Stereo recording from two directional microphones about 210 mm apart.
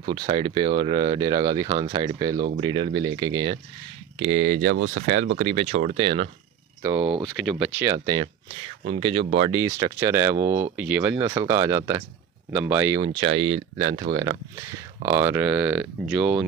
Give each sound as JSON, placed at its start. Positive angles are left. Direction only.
{"t": 0.0, "sound": "speech", "side_deg": -25}
{"t": 4.2, "sound": "speech", "side_deg": -30}
{"t": 6.8, "sound": "speech", "side_deg": -10}
{"t": 7.8, "sound": "speech", "side_deg": -15}
{"t": 13.0, "sound": "speech", "side_deg": -25}